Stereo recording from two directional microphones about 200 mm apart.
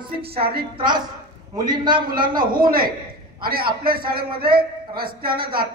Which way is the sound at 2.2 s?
45° right (ahead or behind).